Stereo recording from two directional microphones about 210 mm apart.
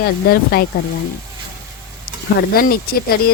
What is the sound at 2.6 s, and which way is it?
Speech, 45° left (ahead or behind).